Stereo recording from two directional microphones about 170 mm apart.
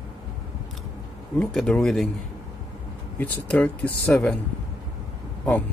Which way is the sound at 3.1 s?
10° left (ahead or behind).